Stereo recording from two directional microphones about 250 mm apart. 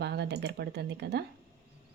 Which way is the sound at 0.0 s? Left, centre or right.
Right.